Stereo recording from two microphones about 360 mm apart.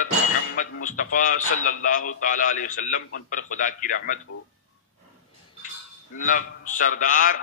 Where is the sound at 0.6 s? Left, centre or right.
Left.